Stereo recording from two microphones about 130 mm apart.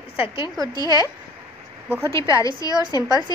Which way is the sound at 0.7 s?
30° left (ahead or behind).